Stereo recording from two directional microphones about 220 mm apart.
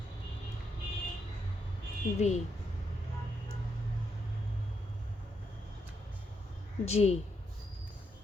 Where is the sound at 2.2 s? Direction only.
30° left (ahead or behind).